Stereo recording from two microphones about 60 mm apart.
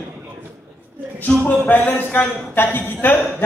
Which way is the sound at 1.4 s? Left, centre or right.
Left.